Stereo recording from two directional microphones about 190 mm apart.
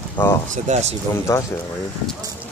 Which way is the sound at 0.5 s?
35° right (ahead or behind).